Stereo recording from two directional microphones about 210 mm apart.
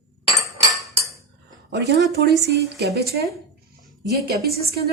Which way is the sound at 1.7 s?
50° right (ahead or behind).